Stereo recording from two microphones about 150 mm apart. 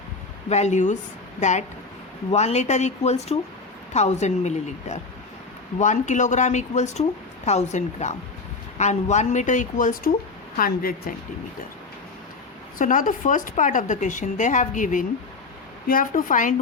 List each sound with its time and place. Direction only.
0.5 s speech: 50° left (ahead or behind)
10.6 s a woman's voice: 75° left (ahead or behind)
12.8 s speech: 60° left (ahead or behind)